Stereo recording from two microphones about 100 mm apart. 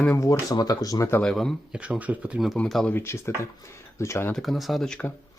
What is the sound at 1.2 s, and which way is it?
Speech, 5° left (ahead or behind).